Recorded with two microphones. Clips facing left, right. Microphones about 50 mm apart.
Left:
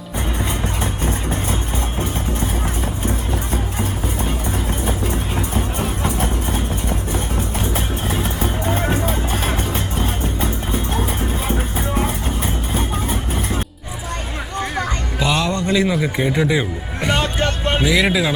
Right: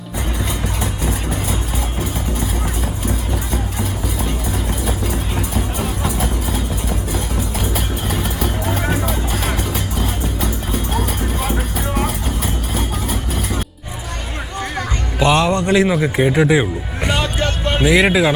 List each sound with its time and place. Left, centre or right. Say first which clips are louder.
4.9 s vehicle: even; centre
15.3 s music: right 5 dB; right
15.5 s a sound: right 3 dB; right
16.1 s speech: right 4 dB; right
17.2 s vehicle: even; left
17.8 s speech: right 5 dB; right